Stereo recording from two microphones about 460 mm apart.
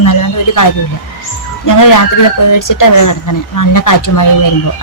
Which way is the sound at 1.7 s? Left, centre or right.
Left.